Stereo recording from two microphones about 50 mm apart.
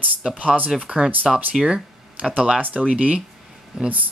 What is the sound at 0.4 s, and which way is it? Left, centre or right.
Speech, right.